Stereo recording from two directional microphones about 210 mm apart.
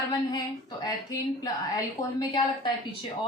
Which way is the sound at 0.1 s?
20° left (ahead or behind).